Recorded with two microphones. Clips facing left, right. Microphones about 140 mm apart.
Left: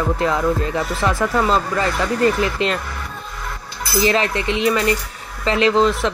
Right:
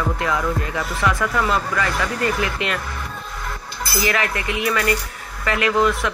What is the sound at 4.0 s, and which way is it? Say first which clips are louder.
Speech: left 5 dB; 30° left (ahead or behind).